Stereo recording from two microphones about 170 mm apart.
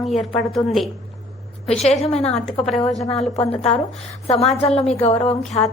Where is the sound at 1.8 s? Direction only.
40° left (ahead or behind).